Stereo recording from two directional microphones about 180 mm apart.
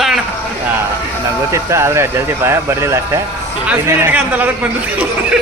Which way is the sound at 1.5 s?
15° right (ahead or behind).